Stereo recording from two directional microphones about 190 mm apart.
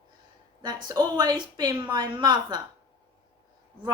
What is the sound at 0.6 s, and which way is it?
A woman's voice, 20° right (ahead or behind).